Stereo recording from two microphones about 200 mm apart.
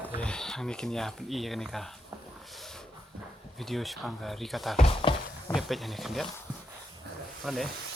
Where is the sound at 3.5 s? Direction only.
Centre (ahead or behind).